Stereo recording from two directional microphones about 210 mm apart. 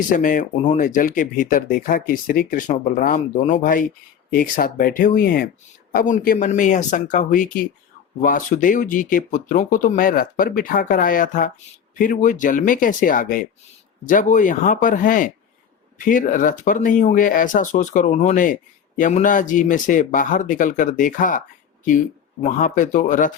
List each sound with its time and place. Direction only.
0.1 s speech: 40° left (ahead or behind)
22.4 s speech: 35° left (ahead or behind)